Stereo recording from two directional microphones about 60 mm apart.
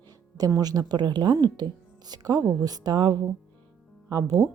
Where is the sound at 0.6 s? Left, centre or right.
Right.